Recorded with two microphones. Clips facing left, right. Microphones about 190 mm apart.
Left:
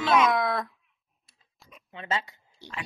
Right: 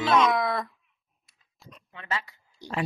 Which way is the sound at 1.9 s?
20° left (ahead or behind).